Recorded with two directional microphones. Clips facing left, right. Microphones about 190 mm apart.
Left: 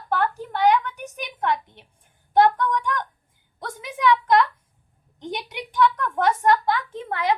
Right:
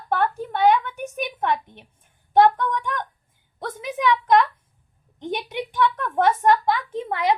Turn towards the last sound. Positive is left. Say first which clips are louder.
# right 2 dB
turn(degrees=-20)  # may be behind; listen again after turning